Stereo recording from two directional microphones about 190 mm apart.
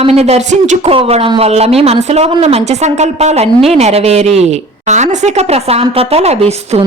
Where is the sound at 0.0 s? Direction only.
30° right (ahead or behind).